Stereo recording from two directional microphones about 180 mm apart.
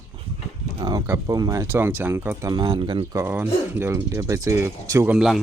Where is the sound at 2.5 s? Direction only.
25° right (ahead or behind).